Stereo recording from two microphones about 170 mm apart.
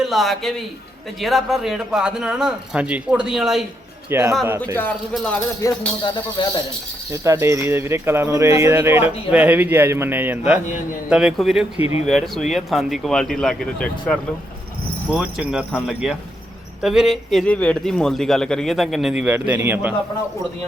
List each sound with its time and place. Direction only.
0.0 s a man's voice: centre (ahead or behind)
4.1 s speech: 15° right (ahead or behind)
5.1 s a man's voice: 5° left (ahead or behind)
5.6 s speech: 25° left (ahead or behind)
7.1 s a man's voice: 15° right (ahead or behind)